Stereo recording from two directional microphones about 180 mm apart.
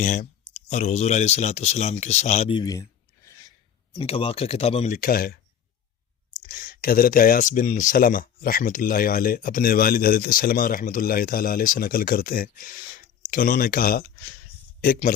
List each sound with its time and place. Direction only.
0.0 s speech: 40° left (ahead or behind)
2.6 s speech: 20° left (ahead or behind)
3.9 s speech: 30° left (ahead or behind)
4.9 s speech: 55° left (ahead or behind)
6.5 s speech: 55° left (ahead or behind)